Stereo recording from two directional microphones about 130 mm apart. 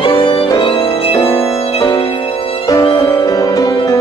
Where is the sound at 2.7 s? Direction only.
25° left (ahead or behind).